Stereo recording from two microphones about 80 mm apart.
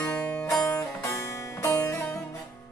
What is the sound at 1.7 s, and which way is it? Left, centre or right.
Music, left.